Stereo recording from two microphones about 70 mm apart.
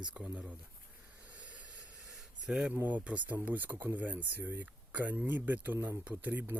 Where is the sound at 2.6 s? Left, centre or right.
Right.